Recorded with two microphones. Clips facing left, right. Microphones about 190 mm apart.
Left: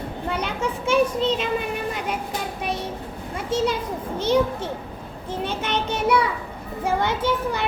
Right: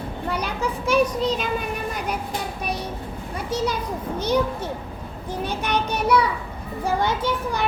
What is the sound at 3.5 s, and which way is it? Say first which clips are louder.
A child's voice: left 2 dB; 25° left (ahead or behind).